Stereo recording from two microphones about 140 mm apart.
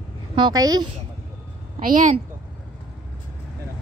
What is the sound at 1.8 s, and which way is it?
Speech, 75° right (ahead or behind).